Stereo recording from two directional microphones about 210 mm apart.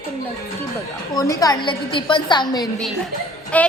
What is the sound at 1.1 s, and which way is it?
A woman's voice, 15° left (ahead or behind).